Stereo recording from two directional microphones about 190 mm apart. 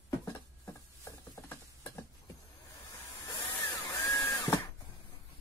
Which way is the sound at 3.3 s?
25° left (ahead or behind).